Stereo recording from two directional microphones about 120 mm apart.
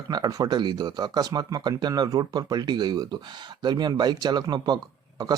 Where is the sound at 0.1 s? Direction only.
30° right (ahead or behind).